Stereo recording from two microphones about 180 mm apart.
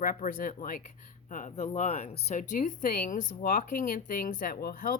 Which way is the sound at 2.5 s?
45° left (ahead or behind).